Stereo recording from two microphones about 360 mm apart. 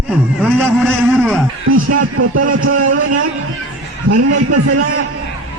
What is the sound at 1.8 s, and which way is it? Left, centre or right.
A man's voice, right.